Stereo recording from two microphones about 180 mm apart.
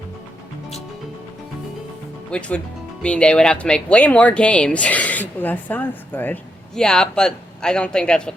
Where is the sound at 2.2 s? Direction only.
5° left (ahead or behind).